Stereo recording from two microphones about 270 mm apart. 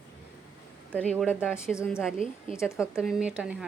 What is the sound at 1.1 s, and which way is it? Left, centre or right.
Speech, centre.